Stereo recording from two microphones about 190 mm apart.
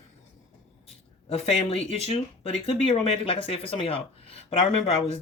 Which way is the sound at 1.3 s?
35° left (ahead or behind).